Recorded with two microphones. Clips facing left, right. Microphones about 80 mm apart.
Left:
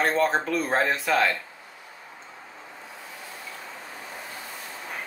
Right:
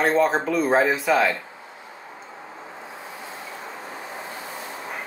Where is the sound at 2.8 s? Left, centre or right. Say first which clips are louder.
Right 4 dB; right.